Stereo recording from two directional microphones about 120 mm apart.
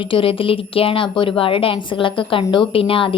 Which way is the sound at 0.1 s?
45° left (ahead or behind).